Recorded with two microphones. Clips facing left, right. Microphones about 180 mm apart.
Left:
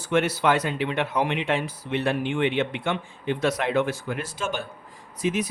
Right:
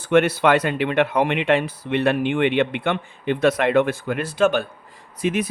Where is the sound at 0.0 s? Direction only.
60° right (ahead or behind).